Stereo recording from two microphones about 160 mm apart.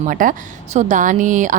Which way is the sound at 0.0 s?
55° right (ahead or behind).